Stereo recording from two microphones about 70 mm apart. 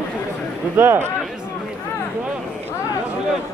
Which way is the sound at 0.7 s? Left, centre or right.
Right.